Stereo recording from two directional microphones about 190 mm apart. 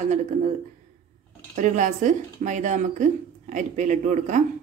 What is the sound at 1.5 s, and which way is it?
Speech, 40° right (ahead or behind).